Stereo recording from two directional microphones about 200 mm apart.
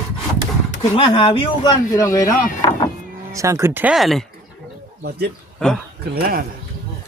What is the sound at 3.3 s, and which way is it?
Speech, 15° right (ahead or behind).